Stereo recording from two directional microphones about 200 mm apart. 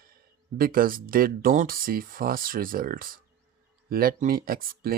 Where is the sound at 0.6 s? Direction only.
45° right (ahead or behind).